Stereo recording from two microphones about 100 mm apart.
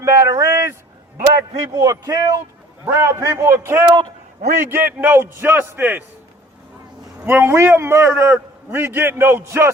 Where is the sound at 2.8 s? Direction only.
30° right (ahead or behind).